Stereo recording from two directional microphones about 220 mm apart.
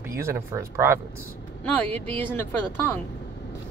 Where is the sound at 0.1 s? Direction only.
10° right (ahead or behind).